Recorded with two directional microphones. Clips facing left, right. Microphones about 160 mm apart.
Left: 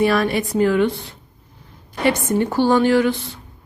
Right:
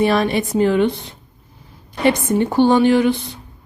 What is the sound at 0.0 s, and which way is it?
A woman's voice, 25° right (ahead or behind).